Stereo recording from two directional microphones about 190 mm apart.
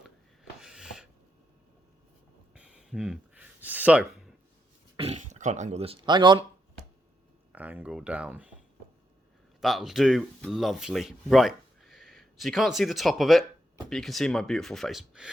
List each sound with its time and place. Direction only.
0.6 s snort: 5° right (ahead or behind)
2.6 s a sound: 5° right (ahead or behind)
4.9 s speech: 35° right (ahead or behind)
7.5 s speech: 10° right (ahead or behind)
9.6 s speech: centre (ahead or behind)